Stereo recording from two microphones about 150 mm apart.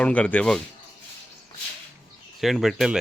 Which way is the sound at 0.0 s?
10° left (ahead or behind).